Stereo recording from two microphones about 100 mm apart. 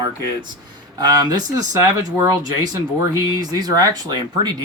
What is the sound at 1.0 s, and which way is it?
Speech, 40° right (ahead or behind).